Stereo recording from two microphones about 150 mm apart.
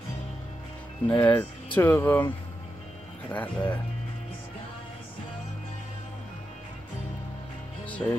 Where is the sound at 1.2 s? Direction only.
10° left (ahead or behind).